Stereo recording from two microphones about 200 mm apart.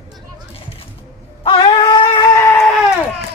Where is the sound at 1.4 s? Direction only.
25° left (ahead or behind).